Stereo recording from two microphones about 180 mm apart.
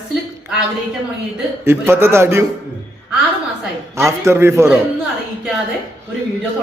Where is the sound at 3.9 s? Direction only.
15° right (ahead or behind).